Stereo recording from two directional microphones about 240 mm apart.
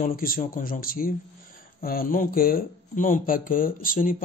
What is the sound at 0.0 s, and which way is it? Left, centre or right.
A man's voice, left.